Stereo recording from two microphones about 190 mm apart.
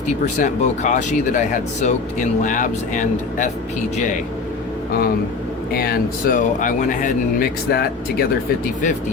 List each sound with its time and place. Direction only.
0.3 s speech: 40° left (ahead or behind)
5.7 s speech: 55° left (ahead or behind)